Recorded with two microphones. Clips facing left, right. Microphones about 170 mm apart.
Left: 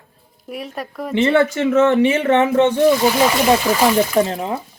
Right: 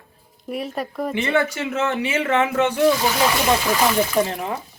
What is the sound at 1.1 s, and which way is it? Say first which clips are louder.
Speech: left 7 dB; 25° left (ahead or behind).